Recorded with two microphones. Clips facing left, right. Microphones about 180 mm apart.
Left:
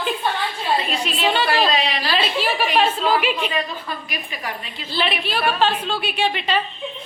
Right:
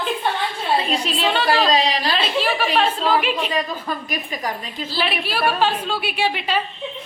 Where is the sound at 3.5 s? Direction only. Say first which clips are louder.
Right 2 dB; 45° right (ahead or behind).